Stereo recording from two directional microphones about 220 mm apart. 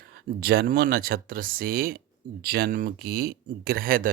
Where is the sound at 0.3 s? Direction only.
45° right (ahead or behind).